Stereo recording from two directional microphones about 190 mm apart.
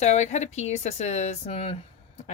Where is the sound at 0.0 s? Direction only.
35° left (ahead or behind).